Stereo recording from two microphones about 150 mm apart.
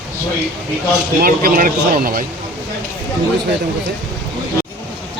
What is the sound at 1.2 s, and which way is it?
Speech, 75° right (ahead or behind).